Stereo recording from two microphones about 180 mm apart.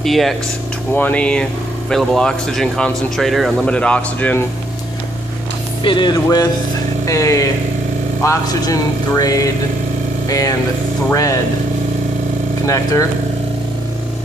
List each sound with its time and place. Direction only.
0.0 s speech: centre (ahead or behind)
5.9 s speech: 25° left (ahead or behind)
7.1 s vehicle: 20° left (ahead or behind)
8.2 s speech: 20° left (ahead or behind)
11.1 s vehicle: 15° left (ahead or behind)
12.6 s vehicle: 15° left (ahead or behind)